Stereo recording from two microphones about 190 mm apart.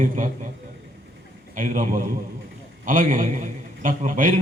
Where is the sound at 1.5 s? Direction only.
45° right (ahead or behind).